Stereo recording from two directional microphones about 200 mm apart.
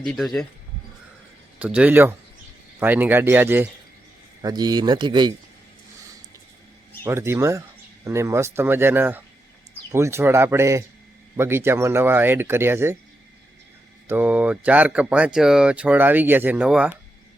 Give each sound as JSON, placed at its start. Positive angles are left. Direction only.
{"t": 0.0, "sound": "speech", "side_deg": 0}
{"t": 1.5, "sound": "speech", "side_deg": -5}
{"t": 4.4, "sound": "speech", "side_deg": -20}
{"t": 7.0, "sound": "speech", "side_deg": -15}
{"t": 14.1, "sound": "speech", "side_deg": -10}